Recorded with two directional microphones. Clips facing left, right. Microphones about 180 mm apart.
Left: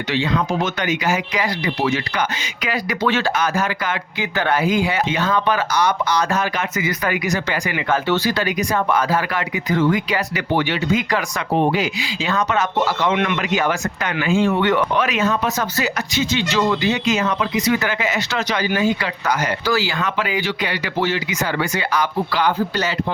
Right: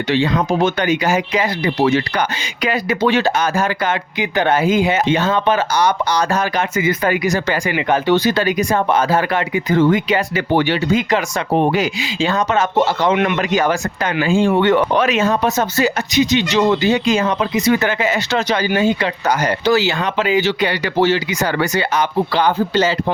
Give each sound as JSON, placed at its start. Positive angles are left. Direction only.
{"t": 0.1, "sound": "speech", "side_deg": -35}
{"t": 3.1, "sound": "speech", "side_deg": -15}
{"t": 3.3, "sound": "speech", "side_deg": -30}
{"t": 7.9, "sound": "speech", "side_deg": -20}
{"t": 11.5, "sound": "speech", "side_deg": -55}
{"t": 11.9, "sound": "speech", "side_deg": -25}